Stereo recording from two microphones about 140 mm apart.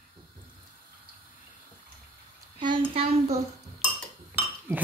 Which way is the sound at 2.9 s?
45° right (ahead or behind).